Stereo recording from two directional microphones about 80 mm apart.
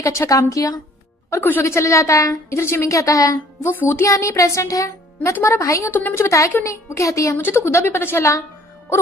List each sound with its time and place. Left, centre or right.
0.0 s a woman's voice: left
1.3 s speech: left
1.6 s a woman's voice: left
3.7 s a woman's voice: left
7.3 s a woman's voice: left